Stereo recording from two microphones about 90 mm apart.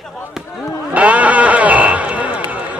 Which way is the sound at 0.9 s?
15° right (ahead or behind).